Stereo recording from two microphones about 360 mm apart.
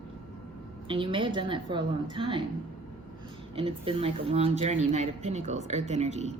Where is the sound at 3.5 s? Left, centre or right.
Centre.